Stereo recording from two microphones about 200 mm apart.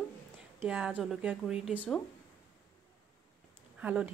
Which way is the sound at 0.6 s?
5° right (ahead or behind).